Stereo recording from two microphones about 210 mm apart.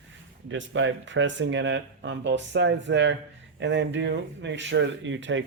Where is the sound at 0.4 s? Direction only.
60° right (ahead or behind).